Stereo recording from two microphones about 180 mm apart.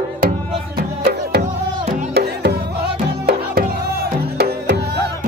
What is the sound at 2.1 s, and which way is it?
Music, 65° right (ahead or behind).